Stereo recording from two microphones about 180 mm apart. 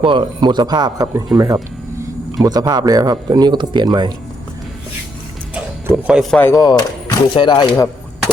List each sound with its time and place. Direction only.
0.0 s speech: 30° right (ahead or behind)
5.5 s music: 5° right (ahead or behind)
6.3 s speech: 5° left (ahead or behind)
6.6 s speech: 20° left (ahead or behind)